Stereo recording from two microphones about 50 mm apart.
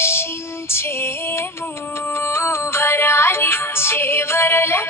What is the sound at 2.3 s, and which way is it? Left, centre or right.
Music, left.